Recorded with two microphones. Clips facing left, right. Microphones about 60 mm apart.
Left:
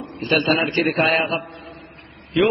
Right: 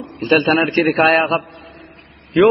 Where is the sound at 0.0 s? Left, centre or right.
Right.